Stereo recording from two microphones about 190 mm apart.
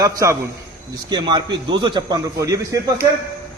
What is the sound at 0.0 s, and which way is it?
A man's voice, 20° right (ahead or behind).